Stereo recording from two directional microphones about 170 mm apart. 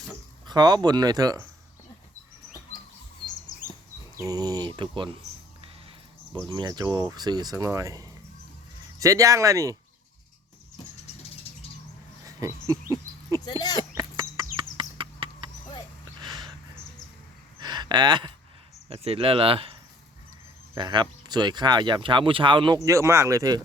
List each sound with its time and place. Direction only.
0.4 s speech: 25° right (ahead or behind)
4.3 s speech: 25° right (ahead or behind)
6.5 s speech: 25° right (ahead or behind)
12.7 s speech: 20° right (ahead or behind)
13.4 s a sound: 25° left (ahead or behind)
13.9 s bird: 20° right (ahead or behind)
14.5 s a sound: 30° right (ahead or behind)
17.6 s a sound: 25° right (ahead or behind)
18.9 s speech: 35° right (ahead or behind)
22.9 s speech: 15° right (ahead or behind)